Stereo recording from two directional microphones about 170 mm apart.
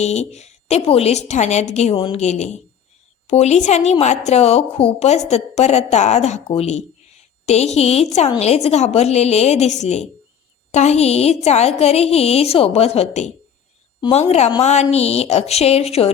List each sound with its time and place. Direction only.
0.0 s a woman's voice: 40° left (ahead or behind)